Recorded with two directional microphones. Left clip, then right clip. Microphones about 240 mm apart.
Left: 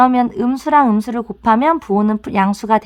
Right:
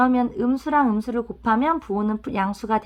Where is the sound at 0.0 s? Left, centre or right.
Left.